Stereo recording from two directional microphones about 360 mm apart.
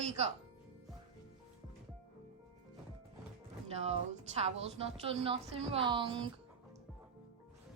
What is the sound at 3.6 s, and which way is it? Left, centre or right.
A woman's voice, centre.